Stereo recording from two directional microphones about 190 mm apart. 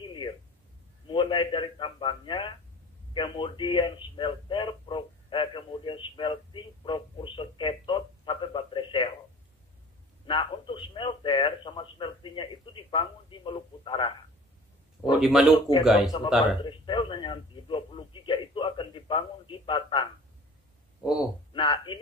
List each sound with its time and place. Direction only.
0.0 s a sound: 25° left (ahead or behind)
3.1 s a man's voice: 25° left (ahead or behind)
10.2 s a man's voice: 25° left (ahead or behind)
15.1 s speech: centre (ahead or behind)
16.6 s a man's voice: 25° left (ahead or behind)
21.0 s speech: centre (ahead or behind)
21.5 s a man's voice: 25° left (ahead or behind)